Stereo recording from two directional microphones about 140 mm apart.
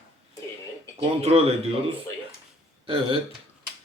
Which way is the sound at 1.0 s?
45° right (ahead or behind).